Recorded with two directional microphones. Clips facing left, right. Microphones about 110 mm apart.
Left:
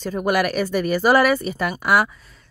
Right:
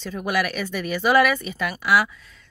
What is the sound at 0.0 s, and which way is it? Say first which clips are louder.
A woman's voice: left 4 dB; 45° left (ahead or behind).